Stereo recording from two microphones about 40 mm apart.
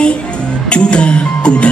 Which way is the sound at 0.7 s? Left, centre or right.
Left.